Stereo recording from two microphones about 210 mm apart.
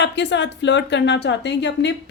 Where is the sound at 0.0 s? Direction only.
55° left (ahead or behind).